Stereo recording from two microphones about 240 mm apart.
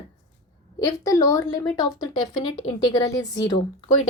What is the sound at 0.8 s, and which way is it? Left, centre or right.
A woman's voice, centre.